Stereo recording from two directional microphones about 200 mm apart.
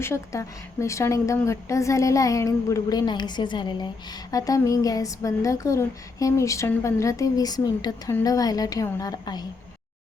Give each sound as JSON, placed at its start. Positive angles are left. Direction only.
{"t": 0.0, "sound": "speech", "side_deg": 15}